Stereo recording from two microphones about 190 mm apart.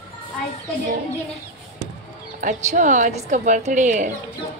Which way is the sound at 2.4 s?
40° right (ahead or behind).